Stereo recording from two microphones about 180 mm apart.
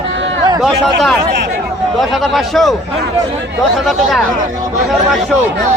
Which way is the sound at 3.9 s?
Centre (ahead or behind).